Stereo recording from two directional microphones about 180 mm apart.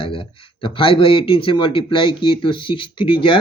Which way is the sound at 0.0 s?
30° left (ahead or behind).